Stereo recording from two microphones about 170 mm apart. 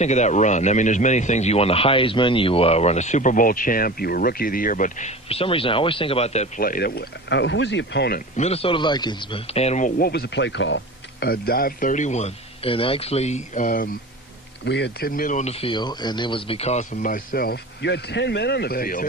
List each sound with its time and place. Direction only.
0.0 s speech: 45° left (ahead or behind)
6.6 s speech: 60° left (ahead or behind); by 8.2 s 75° left (ahead or behind)
8.4 s speech: 35° left (ahead or behind)
10.0 s speech: 70° left (ahead or behind); by 13.9 s 55° left (ahead or behind)
14.6 s speech: 85° left; by 19.0 s 60° left (ahead or behind)